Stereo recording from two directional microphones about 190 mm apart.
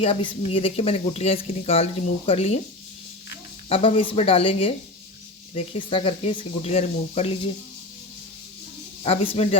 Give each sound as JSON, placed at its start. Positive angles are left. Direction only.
{"t": 0.0, "sound": "speech", "side_deg": 25}
{"t": 3.7, "sound": "speech", "side_deg": 25}
{"t": 9.0, "sound": "speech", "side_deg": 30}